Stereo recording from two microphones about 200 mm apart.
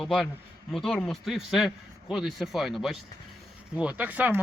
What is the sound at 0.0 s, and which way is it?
A man's voice, centre (ahead or behind).